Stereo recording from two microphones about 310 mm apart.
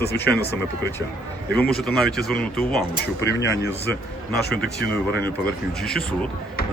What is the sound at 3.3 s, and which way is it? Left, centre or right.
Speech, left.